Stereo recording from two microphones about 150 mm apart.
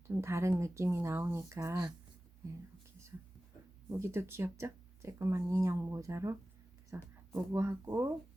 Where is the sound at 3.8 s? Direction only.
15° right (ahead or behind).